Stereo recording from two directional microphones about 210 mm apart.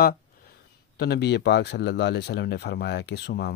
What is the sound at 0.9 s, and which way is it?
Speech, 50° left (ahead or behind).